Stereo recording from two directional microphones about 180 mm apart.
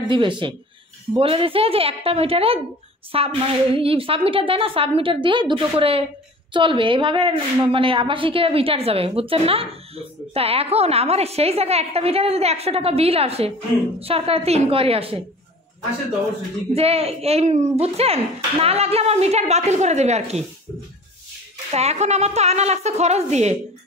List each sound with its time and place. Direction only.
0.1 s a woman's voice: 25° right (ahead or behind)
16.7 s a woman's voice: 35° right (ahead or behind)
21.7 s a woman's voice: 40° right (ahead or behind)